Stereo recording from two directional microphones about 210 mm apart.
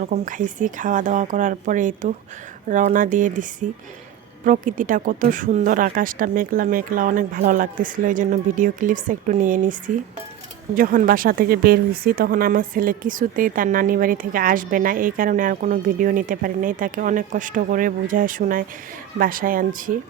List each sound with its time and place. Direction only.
0.0 s speech: 40° right (ahead or behind)